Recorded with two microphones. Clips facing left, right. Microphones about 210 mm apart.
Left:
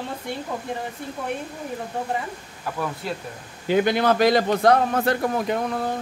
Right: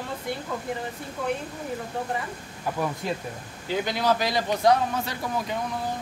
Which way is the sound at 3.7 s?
60° left (ahead or behind).